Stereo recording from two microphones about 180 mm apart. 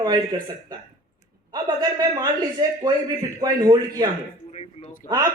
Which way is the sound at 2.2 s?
20° right (ahead or behind).